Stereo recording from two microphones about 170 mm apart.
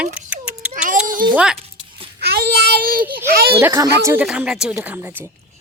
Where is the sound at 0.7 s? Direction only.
50° right (ahead or behind).